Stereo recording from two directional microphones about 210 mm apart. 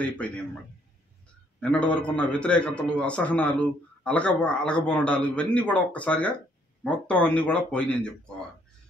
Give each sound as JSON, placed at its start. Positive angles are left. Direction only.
{"t": 1.6, "sound": "a man's voice", "side_deg": 5}